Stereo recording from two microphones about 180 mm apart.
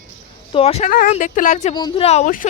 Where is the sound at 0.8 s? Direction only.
50° left (ahead or behind).